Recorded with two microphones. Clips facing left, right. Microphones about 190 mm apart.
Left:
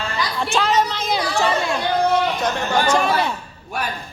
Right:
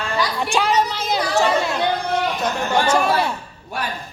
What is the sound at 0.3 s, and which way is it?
Chatter, 15° right (ahead or behind).